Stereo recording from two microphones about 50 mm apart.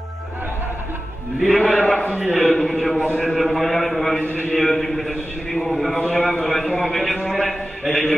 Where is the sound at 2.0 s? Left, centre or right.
Right.